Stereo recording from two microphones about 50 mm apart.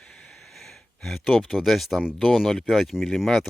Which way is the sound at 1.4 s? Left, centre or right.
Centre.